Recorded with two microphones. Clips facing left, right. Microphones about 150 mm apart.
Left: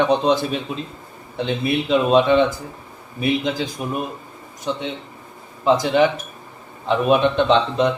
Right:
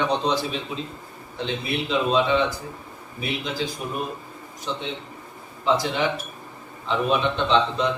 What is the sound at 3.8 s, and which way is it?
Speech, 50° left (ahead or behind).